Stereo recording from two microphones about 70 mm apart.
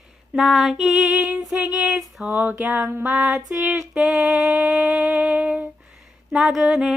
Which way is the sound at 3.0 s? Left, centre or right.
Centre.